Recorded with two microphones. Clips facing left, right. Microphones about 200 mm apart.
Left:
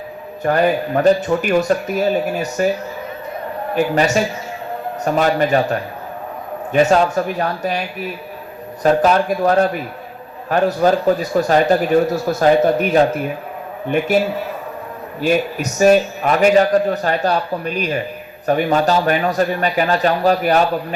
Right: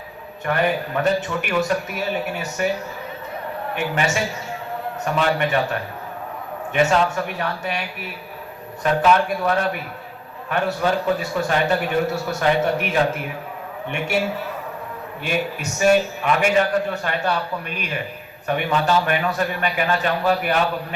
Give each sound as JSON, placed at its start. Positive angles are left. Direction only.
{"t": 0.4, "sound": "a man's voice", "side_deg": 35}
{"t": 3.8, "sound": "a man's voice", "side_deg": 35}
{"t": 6.7, "sound": "a man's voice", "side_deg": 40}
{"t": 15.8, "sound": "a man's voice", "side_deg": 40}